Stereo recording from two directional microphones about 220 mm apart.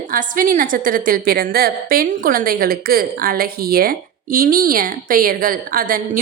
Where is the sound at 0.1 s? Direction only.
40° right (ahead or behind).